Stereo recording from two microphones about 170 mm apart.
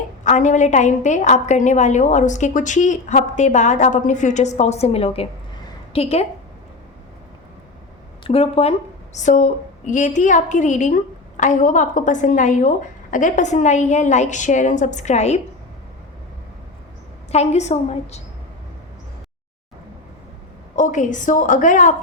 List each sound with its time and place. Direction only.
0.3 s a woman's voice: 45° left (ahead or behind)
8.2 s a woman's voice: 35° left (ahead or behind)
9.1 s a woman's voice: 45° left (ahead or behind)
17.3 s a woman's voice: 40° left (ahead or behind)
20.7 s a woman's voice: 45° left (ahead or behind)